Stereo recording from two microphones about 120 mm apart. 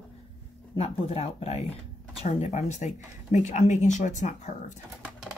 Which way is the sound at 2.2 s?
70° left (ahead or behind).